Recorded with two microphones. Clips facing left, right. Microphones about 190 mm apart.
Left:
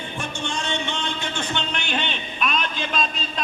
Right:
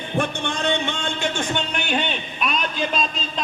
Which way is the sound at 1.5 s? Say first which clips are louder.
Right 3 dB; 10° right (ahead or behind).